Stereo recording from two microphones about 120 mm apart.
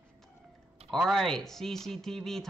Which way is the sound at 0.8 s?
Centre (ahead or behind).